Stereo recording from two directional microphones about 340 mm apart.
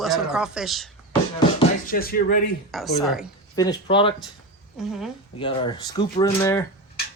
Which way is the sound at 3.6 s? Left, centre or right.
Centre.